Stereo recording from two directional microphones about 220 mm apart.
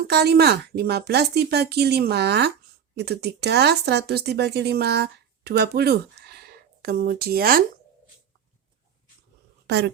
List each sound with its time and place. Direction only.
0.1 s speech: 45° right (ahead or behind)
9.6 s speech: 50° right (ahead or behind)